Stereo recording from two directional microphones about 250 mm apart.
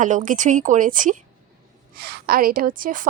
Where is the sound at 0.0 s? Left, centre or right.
Right.